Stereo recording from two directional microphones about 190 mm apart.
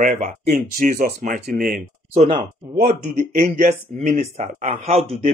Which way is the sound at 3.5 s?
35° right (ahead or behind).